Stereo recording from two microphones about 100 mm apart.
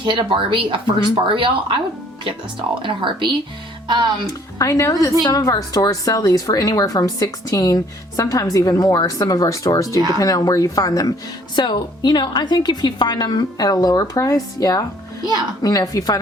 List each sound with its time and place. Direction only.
0.0 s speech: 50° right (ahead or behind)
4.5 s a woman's voice: 35° left (ahead or behind)
11.5 s a woman's voice: 50° left (ahead or behind)